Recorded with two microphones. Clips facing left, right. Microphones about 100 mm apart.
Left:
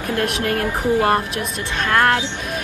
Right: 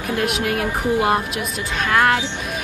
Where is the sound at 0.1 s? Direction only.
5° right (ahead or behind).